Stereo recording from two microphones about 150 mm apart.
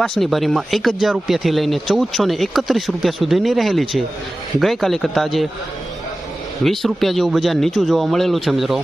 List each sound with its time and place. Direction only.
0.0 s speech: 5° left (ahead or behind)
6.6 s speech: centre (ahead or behind)